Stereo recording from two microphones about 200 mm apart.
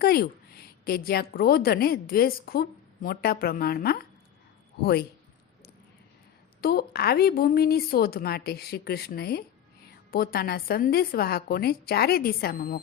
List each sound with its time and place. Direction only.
0.0 s a woman's voice: 50° left (ahead or behind)
6.6 s a woman's voice: 50° left (ahead or behind)